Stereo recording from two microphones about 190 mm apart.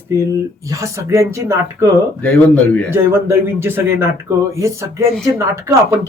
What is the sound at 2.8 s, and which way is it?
Speech, 15° right (ahead or behind).